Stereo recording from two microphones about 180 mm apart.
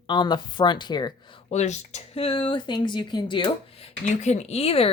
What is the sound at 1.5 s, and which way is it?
Speech, 40° left (ahead or behind).